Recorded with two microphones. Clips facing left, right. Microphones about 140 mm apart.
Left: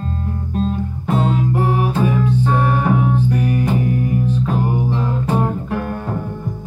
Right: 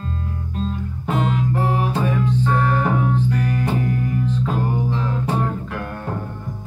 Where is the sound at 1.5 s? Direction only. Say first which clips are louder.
Left 3 dB; 15° left (ahead or behind).